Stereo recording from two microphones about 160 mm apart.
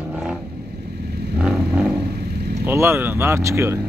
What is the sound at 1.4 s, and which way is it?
Vehicle, 5° right (ahead or behind).